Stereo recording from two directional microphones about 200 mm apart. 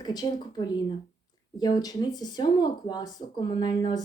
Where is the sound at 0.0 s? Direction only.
20° left (ahead or behind).